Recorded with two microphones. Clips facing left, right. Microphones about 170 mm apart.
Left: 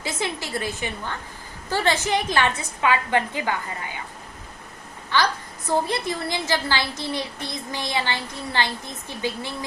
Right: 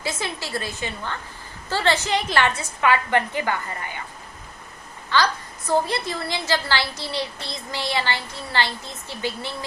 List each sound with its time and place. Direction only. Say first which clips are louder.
0.0 s a woman's voice: left 1 dB; 15° left (ahead or behind)
5.6 s a woman's voice: right 1 dB; 15° left (ahead or behind)